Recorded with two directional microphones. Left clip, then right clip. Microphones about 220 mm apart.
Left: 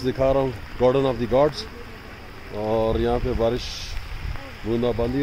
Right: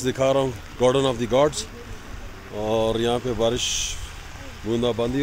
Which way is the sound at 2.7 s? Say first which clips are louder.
Even; 15° right (ahead or behind).